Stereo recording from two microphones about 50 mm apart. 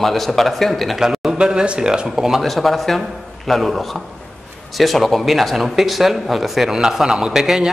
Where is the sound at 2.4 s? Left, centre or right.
Centre.